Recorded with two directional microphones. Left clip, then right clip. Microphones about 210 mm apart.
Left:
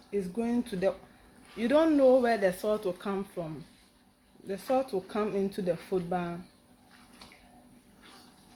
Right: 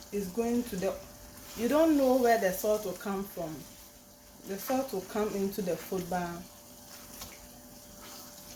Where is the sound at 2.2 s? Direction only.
50° left (ahead or behind).